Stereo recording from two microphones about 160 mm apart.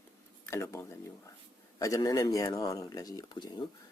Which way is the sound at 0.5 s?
15° left (ahead or behind).